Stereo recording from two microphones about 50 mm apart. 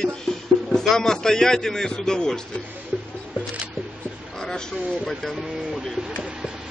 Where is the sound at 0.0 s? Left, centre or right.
Centre.